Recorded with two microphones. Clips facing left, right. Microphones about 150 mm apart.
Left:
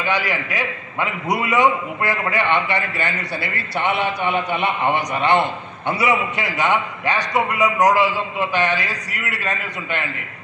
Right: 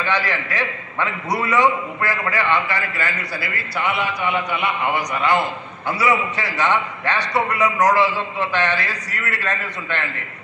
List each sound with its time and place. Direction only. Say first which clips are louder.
0.0 s a man's voice: even; 15° left (ahead or behind)